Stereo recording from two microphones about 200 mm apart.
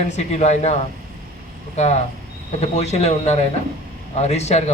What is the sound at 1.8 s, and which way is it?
A man's voice, 35° left (ahead or behind).